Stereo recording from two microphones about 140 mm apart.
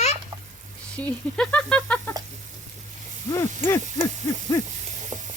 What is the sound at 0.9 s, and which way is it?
Speech, 10° left (ahead or behind).